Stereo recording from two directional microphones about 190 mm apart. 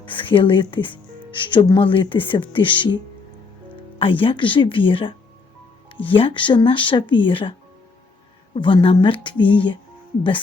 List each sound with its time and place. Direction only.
0.0 s speech: 25° left (ahead or behind)
3.9 s speech: 30° left (ahead or behind)
8.5 s speech: 25° left (ahead or behind)